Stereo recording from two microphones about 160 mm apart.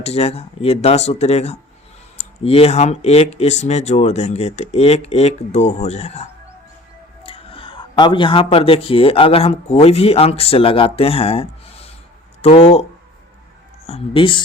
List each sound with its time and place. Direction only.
0.0 s speech: 40° left (ahead or behind)
7.3 s speech: 35° left (ahead or behind)
13.8 s speech: 40° left (ahead or behind)